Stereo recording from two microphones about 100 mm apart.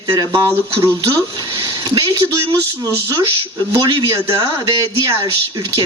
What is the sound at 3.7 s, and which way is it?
Speech, 45° right (ahead or behind).